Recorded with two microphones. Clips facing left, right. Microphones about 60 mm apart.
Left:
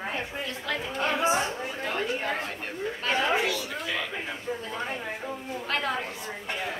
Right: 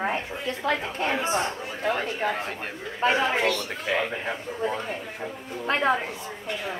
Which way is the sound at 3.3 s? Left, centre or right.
Centre.